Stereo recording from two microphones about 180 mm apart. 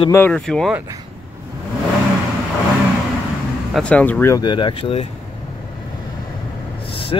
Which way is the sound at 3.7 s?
5° left (ahead or behind).